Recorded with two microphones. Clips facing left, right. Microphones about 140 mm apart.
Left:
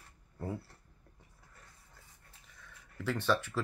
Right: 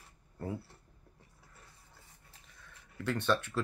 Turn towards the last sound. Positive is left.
turn(degrees=10)  # may be behind; listen again after turning